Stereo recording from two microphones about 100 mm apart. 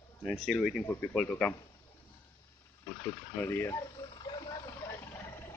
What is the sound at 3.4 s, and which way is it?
Speech, 25° left (ahead or behind).